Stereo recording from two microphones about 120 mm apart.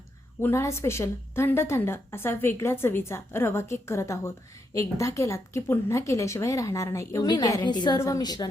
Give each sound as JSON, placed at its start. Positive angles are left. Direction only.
{"t": 0.4, "sound": "a woman's voice", "side_deg": 20}
{"t": 7.3, "sound": "a woman's voice", "side_deg": 35}
{"t": 7.9, "sound": "a woman's voice", "side_deg": 25}